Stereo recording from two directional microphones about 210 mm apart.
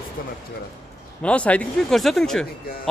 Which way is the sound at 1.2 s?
5° left (ahead or behind).